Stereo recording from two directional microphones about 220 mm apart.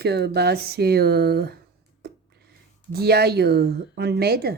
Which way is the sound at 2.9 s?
45° right (ahead or behind).